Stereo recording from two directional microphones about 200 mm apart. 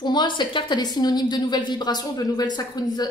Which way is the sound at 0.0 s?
20° left (ahead or behind).